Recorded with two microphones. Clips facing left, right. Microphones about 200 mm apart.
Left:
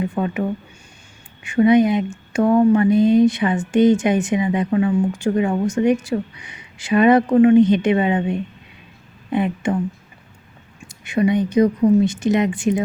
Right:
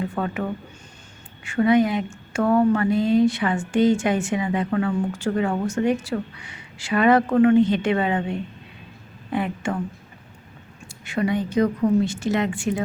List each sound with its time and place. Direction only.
0.0 s speech: 15° left (ahead or behind)
1.5 s a woman's voice: 20° left (ahead or behind)
10.8 s a woman's voice: 15° left (ahead or behind)